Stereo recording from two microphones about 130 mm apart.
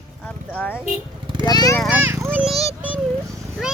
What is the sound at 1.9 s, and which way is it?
Children playing, 20° right (ahead or behind).